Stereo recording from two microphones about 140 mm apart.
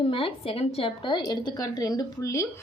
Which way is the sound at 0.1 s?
40° left (ahead or behind).